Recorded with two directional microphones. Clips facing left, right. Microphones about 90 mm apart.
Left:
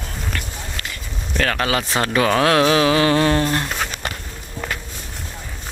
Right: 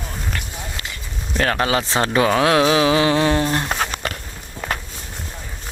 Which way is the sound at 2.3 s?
10° right (ahead or behind).